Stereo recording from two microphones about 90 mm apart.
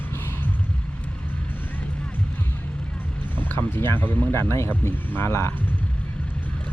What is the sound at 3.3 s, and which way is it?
Speech, 25° left (ahead or behind).